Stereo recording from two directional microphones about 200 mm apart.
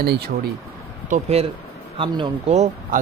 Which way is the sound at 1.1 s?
30° right (ahead or behind).